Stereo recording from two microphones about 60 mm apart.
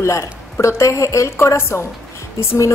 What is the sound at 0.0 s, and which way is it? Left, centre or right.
A woman's voice, left.